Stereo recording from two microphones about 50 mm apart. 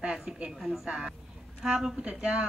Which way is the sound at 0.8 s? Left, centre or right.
Right.